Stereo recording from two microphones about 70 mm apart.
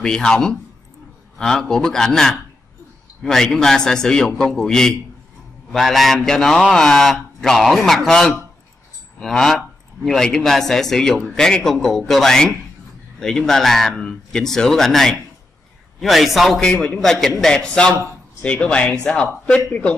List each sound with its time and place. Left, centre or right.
0.0 s a man's voice: centre